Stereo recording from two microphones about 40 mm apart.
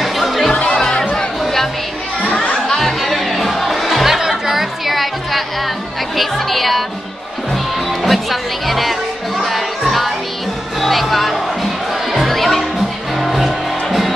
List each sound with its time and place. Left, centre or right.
0.0 s music: centre
0.5 s music: left
0.7 s music: centre
2.5 s music: centre
3.0 s music: centre